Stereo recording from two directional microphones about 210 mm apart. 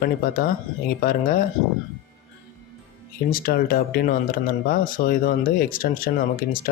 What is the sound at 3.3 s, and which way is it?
Speech, 45° left (ahead or behind).